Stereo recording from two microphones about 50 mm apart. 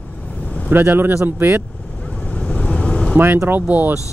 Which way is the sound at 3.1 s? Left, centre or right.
Right.